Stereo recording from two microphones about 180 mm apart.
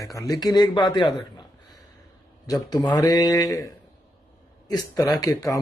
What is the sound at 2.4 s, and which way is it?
Speech, 20° left (ahead or behind).